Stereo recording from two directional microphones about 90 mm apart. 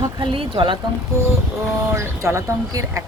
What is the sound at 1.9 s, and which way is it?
Speech, 35° right (ahead or behind).